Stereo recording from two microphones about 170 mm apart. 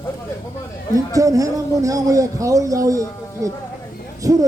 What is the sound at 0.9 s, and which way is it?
A man's voice, 20° right (ahead or behind).